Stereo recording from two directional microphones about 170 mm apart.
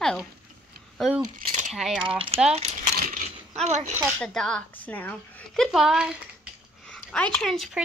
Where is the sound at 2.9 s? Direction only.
60° right (ahead or behind).